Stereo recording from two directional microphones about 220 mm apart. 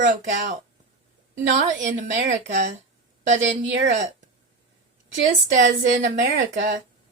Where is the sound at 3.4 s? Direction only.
55° right (ahead or behind).